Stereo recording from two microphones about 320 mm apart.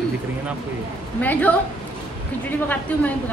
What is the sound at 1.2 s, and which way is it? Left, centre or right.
Speech, centre.